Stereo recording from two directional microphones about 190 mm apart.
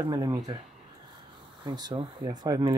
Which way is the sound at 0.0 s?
20° right (ahead or behind).